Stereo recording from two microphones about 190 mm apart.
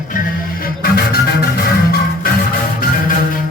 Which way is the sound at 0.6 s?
50° left (ahead or behind).